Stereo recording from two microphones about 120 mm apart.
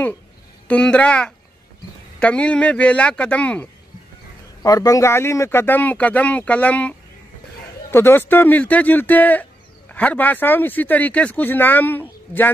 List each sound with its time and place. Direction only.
0.7 s speech: 10° left (ahead or behind)
4.6 s speech: 30° left (ahead or behind)